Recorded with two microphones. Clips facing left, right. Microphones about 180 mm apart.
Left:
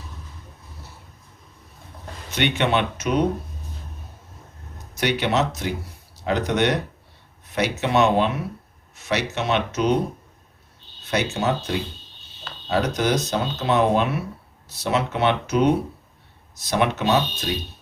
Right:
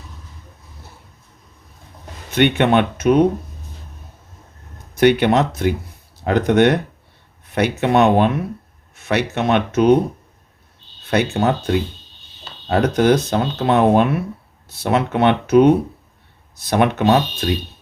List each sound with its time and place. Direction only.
2.3 s speech: 55° right (ahead or behind)
4.9 s speech: 55° right (ahead or behind)
11.1 s speech: 55° right (ahead or behind)